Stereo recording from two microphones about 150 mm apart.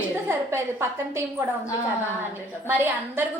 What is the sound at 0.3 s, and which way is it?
A woman's voice, 15° right (ahead or behind).